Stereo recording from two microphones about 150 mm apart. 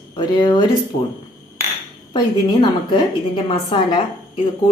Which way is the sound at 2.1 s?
35° left (ahead or behind).